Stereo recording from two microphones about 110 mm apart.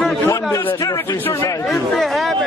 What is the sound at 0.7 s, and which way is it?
Speech, 35° left (ahead or behind).